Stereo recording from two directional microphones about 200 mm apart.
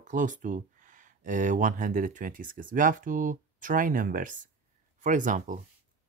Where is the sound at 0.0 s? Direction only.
40° right (ahead or behind).